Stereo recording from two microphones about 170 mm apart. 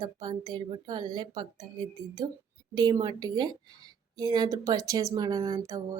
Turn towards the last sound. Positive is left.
turn(degrees=-20)  # may be behind; listen again after turning